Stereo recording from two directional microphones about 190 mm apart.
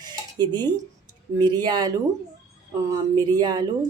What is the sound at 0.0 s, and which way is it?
Dishes, 20° right (ahead or behind).